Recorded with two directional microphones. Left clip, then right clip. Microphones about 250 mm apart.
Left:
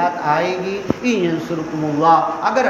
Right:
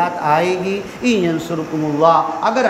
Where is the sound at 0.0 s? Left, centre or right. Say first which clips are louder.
Right 2 dB; right.